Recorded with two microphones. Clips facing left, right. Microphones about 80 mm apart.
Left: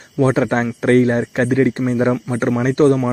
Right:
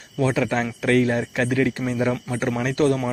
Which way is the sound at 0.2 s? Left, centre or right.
Left.